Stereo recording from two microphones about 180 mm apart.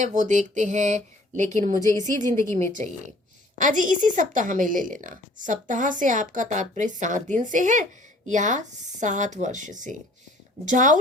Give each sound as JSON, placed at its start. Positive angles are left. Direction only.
{"t": 0.0, "sound": "a woman's voice", "side_deg": -45}